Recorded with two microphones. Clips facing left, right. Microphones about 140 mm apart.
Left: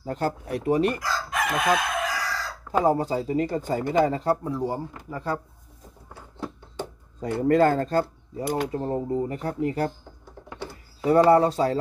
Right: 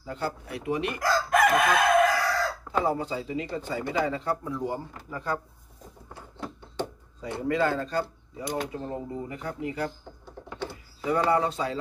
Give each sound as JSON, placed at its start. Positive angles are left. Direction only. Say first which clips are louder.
{"t": 0.0, "sound": "speech", "louder": "left 5 dB", "side_deg": 40}
{"t": 1.0, "sound": "chicken", "louder": "right 5 dB", "side_deg": -50}
{"t": 2.8, "sound": "speech", "louder": "left 6 dB", "side_deg": 40}
{"t": 7.2, "sound": "speech", "louder": "left 7 dB", "side_deg": 45}
{"t": 11.1, "sound": "speech", "louder": "left 7 dB", "side_deg": 40}